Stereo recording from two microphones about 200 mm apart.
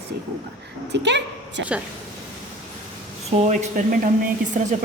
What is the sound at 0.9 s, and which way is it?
Speech, 60° right (ahead or behind).